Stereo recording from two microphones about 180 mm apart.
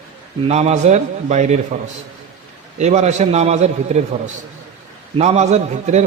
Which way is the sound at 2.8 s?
40° right (ahead or behind).